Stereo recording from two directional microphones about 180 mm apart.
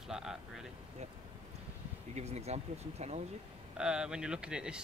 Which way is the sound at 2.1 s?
35° right (ahead or behind).